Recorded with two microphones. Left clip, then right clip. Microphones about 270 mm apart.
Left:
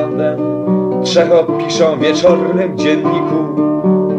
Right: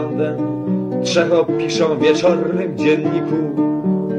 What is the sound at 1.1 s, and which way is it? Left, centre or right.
Speech, centre.